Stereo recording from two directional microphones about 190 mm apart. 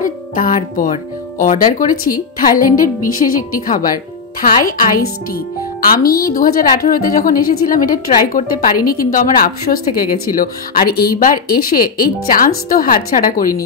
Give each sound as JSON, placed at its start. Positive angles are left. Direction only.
{"t": 0.0, "sound": "speech", "side_deg": 45}